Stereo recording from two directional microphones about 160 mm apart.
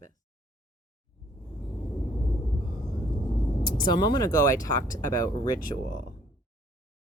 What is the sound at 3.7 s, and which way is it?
Speech, 30° left (ahead or behind).